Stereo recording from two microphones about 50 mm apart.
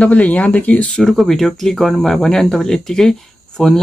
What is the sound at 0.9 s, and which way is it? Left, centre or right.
Speech, centre.